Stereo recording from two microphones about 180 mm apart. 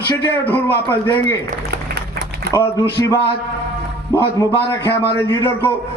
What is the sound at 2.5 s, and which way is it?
Speech, 15° left (ahead or behind).